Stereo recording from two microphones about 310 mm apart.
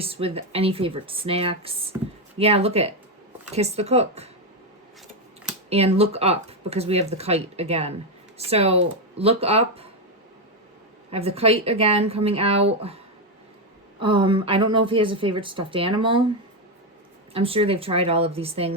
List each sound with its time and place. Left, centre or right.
0.0 s speech: centre
5.6 s speech: centre
11.1 s speech: centre
14.0 s speech: centre
17.3 s speech: centre